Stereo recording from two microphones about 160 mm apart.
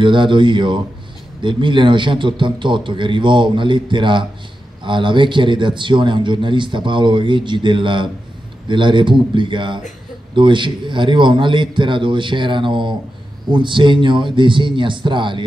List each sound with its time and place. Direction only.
0.0 s speech: 30° right (ahead or behind)